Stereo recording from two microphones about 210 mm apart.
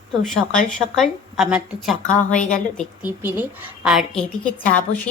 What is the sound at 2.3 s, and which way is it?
Speech, 35° left (ahead or behind).